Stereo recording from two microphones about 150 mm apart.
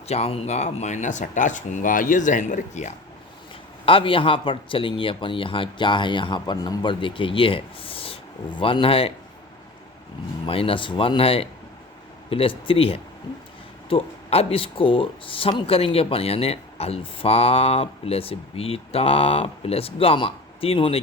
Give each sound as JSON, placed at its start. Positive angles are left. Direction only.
{"t": 0.1, "sound": "speech", "side_deg": 45}
{"t": 3.8, "sound": "speech", "side_deg": 35}
{"t": 10.4, "sound": "speech", "side_deg": 35}